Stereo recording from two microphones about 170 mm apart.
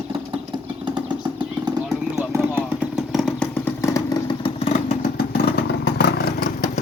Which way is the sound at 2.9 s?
Centre (ahead or behind).